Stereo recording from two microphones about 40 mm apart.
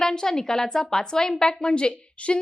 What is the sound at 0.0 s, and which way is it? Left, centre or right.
A woman's voice, centre.